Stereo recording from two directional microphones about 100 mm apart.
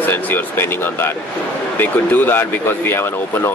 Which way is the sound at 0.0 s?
20° left (ahead or behind).